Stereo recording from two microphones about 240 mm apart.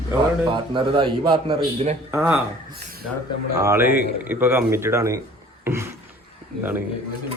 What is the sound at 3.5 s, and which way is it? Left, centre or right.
Speech, centre.